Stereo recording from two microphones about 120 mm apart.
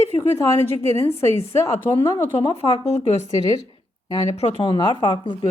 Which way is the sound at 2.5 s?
55° left (ahead or behind).